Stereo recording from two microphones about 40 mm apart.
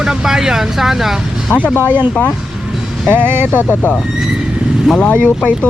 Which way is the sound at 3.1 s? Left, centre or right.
Right.